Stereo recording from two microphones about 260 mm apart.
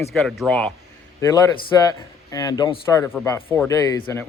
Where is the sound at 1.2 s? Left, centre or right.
Centre.